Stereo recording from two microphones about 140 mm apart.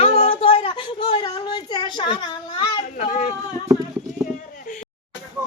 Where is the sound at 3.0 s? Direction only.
60° left (ahead or behind).